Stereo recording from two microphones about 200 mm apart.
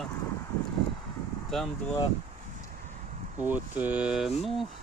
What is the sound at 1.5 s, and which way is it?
Speech, centre (ahead or behind).